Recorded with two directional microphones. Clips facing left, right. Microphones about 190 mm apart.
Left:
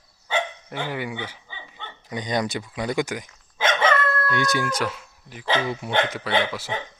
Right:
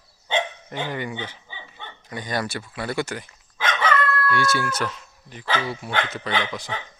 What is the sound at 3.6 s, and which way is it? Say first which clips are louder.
Dog: left 2 dB; 25° left (ahead or behind).